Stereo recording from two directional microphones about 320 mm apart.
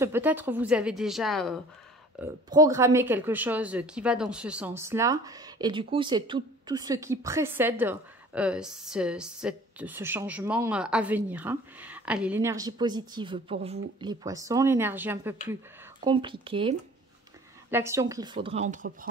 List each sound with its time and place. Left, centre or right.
0.0 s speech: centre
2.1 s speech: centre